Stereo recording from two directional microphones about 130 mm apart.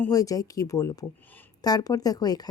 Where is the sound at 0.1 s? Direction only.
25° left (ahead or behind).